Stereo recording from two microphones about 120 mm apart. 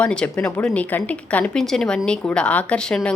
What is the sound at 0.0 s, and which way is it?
Speech, 10° left (ahead or behind).